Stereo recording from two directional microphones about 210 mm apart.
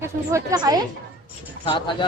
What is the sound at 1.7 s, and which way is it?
Speech, 25° left (ahead or behind).